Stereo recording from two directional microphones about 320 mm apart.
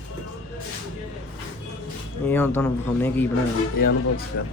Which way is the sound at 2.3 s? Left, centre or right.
Centre.